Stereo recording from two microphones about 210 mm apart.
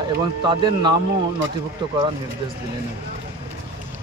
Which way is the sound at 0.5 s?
20° right (ahead or behind).